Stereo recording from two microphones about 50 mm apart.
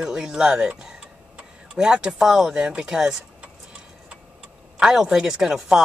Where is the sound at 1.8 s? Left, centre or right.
Centre.